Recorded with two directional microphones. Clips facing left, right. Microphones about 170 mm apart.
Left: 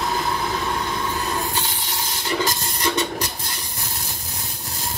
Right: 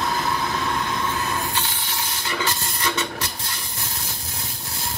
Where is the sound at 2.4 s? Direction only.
35° left (ahead or behind).